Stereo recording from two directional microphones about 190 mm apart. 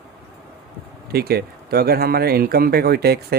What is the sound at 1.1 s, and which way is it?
Speech, 55° right (ahead or behind).